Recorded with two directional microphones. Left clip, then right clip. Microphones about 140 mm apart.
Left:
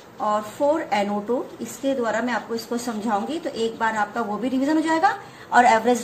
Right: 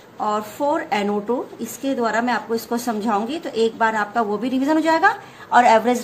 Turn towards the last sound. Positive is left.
turn(degrees=-30)  # may be behind; listen again after turning